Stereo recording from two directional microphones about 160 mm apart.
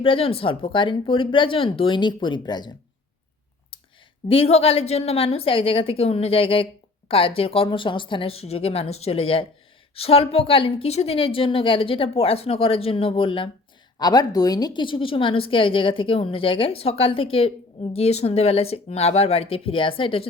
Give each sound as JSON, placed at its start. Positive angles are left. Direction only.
{"t": 0.0, "sound": "a woman's voice", "side_deg": 35}
{"t": 4.3, "sound": "a woman's voice", "side_deg": 35}